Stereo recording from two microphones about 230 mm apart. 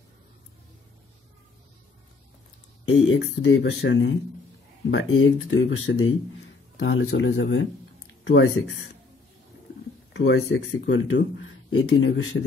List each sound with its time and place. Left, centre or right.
3.1 s speech: left
8.2 s a sound: left
10.1 s speech: left